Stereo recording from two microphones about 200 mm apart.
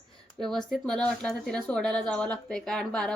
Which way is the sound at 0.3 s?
Centre (ahead or behind).